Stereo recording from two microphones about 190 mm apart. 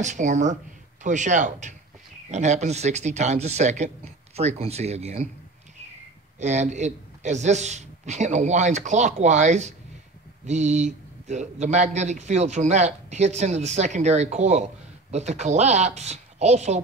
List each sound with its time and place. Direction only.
0.0 s speech: 40° right (ahead or behind)
6.4 s speech: 40° right (ahead or behind)